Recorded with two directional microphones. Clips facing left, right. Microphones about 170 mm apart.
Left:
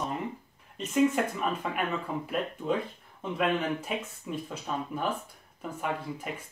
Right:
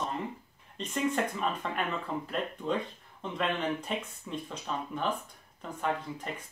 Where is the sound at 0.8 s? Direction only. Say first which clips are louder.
Left 2 dB; 5° left (ahead or behind).